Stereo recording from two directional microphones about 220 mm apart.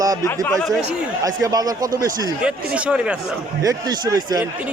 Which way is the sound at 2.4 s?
5° right (ahead or behind).